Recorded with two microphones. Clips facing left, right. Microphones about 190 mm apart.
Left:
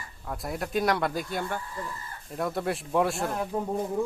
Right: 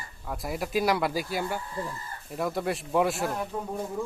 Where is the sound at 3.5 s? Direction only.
20° left (ahead or behind).